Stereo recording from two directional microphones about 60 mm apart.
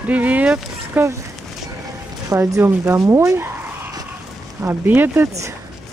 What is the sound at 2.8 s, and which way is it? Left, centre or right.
Speech, right.